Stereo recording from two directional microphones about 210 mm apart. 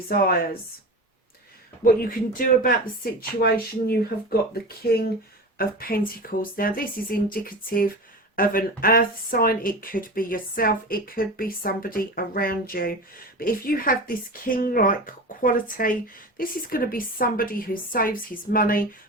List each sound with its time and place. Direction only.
0.1 s speech: 45° left (ahead or behind)
1.8 s speech: 40° left (ahead or behind)